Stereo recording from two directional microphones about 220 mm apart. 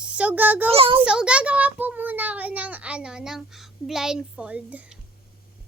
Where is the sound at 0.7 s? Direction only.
25° right (ahead or behind).